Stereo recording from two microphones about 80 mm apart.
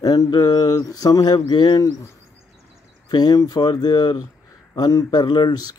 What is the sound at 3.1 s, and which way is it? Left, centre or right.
Speech, left.